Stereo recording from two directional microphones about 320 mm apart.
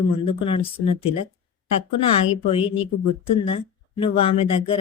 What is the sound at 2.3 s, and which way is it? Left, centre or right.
Speech, centre.